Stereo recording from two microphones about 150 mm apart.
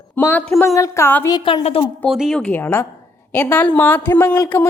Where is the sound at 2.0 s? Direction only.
5° right (ahead or behind).